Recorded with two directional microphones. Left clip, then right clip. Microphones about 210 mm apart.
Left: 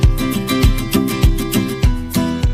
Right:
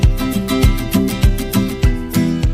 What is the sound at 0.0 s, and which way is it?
Music, centre (ahead or behind).